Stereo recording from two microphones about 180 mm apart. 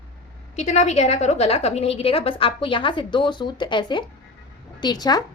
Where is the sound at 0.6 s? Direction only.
40° left (ahead or behind).